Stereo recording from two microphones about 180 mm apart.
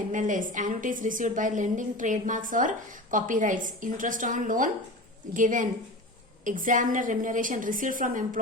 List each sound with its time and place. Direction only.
0.1 s a woman's voice: 45° right (ahead or behind)